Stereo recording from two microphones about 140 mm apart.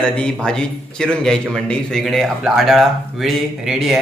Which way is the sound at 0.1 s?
5° left (ahead or behind).